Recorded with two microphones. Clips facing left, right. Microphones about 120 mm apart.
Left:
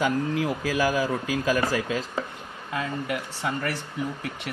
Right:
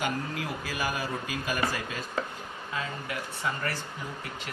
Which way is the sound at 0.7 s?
90° left.